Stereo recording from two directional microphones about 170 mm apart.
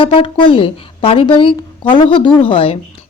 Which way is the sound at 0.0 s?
30° left (ahead or behind).